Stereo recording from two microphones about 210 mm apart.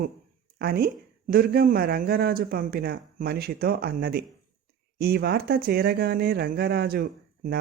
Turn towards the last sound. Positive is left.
turn(degrees=-50)  # may be behind; listen again after turning